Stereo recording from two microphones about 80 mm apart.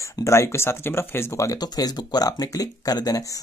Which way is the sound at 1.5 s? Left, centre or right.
Left.